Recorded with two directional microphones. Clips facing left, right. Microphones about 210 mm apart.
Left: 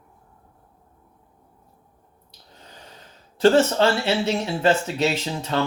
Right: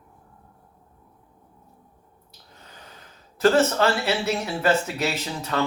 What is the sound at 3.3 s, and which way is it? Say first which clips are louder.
Speech: left 2 dB; 30° left (ahead or behind).